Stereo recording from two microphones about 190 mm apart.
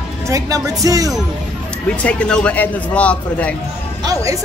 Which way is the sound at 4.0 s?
15° right (ahead or behind).